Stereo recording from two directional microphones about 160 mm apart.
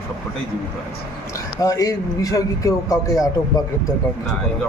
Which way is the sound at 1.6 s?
20° left (ahead or behind).